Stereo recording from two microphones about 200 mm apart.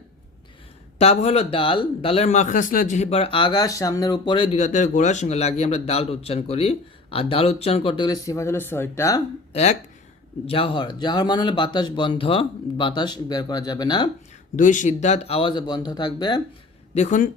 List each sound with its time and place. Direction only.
0.9 s speech: 30° left (ahead or behind); by 9.2 s 15° left (ahead or behind)
9.5 s speech: 35° left (ahead or behind)
14.5 s speech: 40° left (ahead or behind); by 16.4 s 20° left (ahead or behind)
16.9 s speech: 35° left (ahead or behind)